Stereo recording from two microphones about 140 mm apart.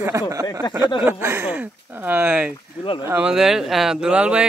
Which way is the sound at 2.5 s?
35° left (ahead or behind).